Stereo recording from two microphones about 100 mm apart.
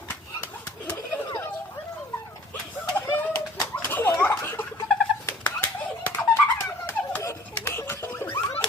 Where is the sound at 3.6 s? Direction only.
25° left (ahead or behind).